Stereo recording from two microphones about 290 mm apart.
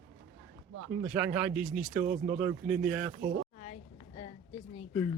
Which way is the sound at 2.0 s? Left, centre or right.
Right.